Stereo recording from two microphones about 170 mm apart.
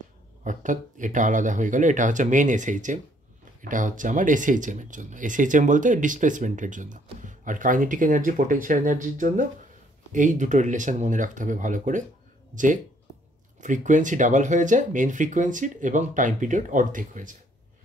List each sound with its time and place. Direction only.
0.4 s speech: 50° right (ahead or behind)